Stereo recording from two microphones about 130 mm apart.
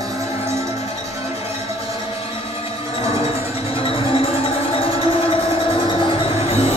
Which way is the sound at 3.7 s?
45° left (ahead or behind).